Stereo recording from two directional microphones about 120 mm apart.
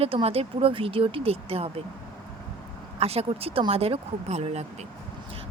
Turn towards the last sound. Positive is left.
turn(degrees=-65)  # may be behind; listen again after turning